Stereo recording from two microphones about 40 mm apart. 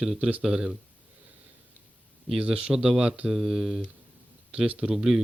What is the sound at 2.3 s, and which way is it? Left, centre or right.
Speech, right.